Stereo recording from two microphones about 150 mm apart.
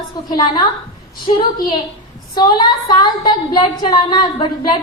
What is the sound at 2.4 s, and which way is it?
A woman's voice, 30° left (ahead or behind).